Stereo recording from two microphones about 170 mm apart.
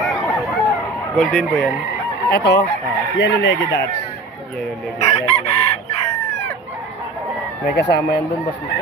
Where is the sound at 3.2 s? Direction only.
90° left.